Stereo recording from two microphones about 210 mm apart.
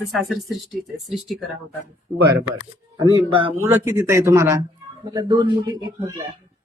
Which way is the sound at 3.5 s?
10° right (ahead or behind).